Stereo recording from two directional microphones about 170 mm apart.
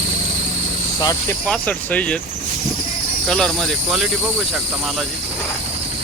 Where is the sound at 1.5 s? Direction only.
10° left (ahead or behind).